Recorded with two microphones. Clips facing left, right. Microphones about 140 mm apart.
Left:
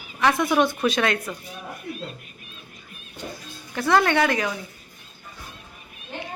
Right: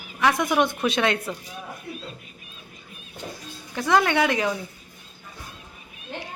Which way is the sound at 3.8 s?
15° right (ahead or behind).